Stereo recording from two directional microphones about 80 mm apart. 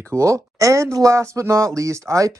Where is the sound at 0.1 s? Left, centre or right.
Right.